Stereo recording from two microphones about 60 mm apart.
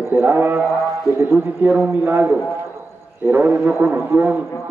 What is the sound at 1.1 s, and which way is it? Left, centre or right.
Speech, right.